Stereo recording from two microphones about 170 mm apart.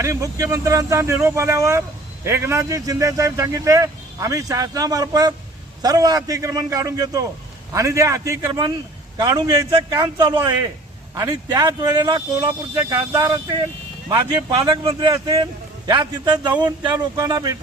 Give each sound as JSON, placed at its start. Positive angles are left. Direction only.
{"t": 0.0, "sound": "speech", "side_deg": -20}